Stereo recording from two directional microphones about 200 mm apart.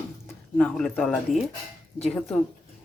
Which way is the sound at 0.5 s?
5° left (ahead or behind).